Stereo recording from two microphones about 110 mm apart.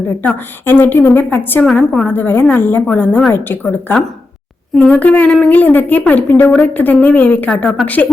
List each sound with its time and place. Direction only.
0.2 s a woman's voice: 15° left (ahead or behind)
1.6 s a woman's voice: 5° left (ahead or behind)
2.0 s a woman's voice: 15° left (ahead or behind)